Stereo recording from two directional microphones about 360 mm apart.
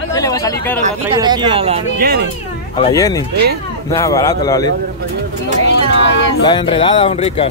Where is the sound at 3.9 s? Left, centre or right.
Centre.